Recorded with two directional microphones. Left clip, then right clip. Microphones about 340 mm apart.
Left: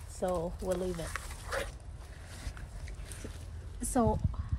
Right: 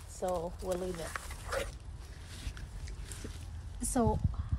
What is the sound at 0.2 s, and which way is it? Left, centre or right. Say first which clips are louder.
Speech: left 1 dB; centre.